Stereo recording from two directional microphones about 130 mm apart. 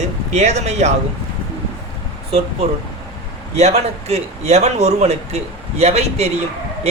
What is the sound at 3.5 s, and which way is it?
A man's voice, 55° right (ahead or behind).